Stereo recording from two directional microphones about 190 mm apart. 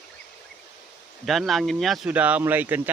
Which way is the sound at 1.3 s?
Centre (ahead or behind).